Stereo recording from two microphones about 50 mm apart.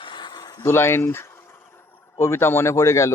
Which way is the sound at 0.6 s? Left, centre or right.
Left.